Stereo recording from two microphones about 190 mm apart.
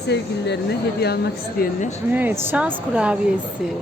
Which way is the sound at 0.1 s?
60° left (ahead or behind).